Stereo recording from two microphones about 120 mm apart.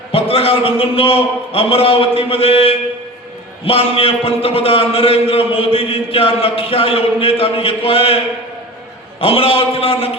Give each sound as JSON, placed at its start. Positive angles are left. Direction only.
{"t": 0.1, "sound": "a man's voice", "side_deg": 55}
{"t": 9.2, "sound": "a man's voice", "side_deg": 50}